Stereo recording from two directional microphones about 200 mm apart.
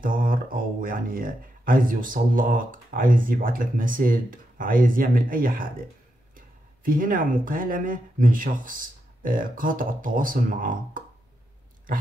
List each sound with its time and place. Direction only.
0.0 s speech: 45° right (ahead or behind)